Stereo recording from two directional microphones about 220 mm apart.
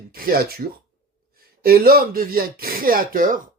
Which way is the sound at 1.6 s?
40° right (ahead or behind).